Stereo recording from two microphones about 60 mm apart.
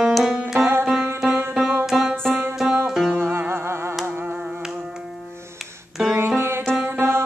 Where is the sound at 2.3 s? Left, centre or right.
Right.